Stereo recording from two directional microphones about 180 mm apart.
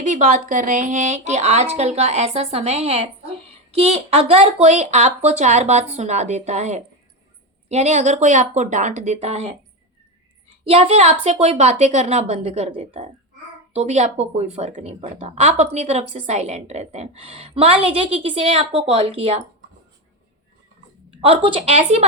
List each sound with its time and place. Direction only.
0.0 s a woman's voice: 50° right (ahead or behind)
10.6 s a woman's voice: 30° right (ahead or behind)
21.2 s a woman's voice: 30° right (ahead or behind)